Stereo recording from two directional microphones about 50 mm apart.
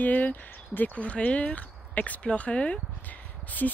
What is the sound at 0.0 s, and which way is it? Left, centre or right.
Speech, left.